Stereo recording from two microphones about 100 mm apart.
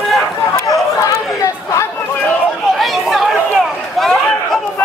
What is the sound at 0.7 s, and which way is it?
Chatter, 35° left (ahead or behind).